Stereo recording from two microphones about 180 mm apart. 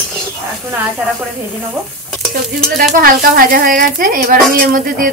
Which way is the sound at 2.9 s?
55° right (ahead or behind).